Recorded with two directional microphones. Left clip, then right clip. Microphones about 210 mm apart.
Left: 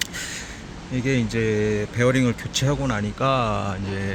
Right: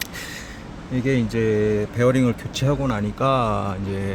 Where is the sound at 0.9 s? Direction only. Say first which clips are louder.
Right 2 dB; 10° right (ahead or behind).